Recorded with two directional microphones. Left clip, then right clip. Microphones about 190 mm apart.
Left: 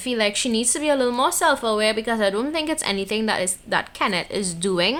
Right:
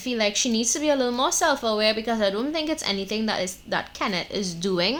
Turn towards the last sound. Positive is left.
turn(degrees=30)  # may be behind; listen again after turning